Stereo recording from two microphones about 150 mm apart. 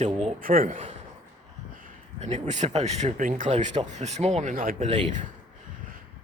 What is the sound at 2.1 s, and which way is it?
Speech, 50° right (ahead or behind).